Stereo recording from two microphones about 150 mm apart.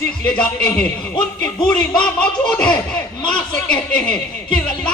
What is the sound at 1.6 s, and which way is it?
Speech, 30° left (ahead or behind).